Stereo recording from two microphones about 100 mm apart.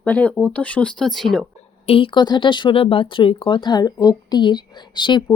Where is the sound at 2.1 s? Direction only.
50° left (ahead or behind).